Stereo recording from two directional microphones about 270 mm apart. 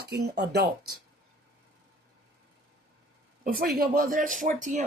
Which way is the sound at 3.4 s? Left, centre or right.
Right.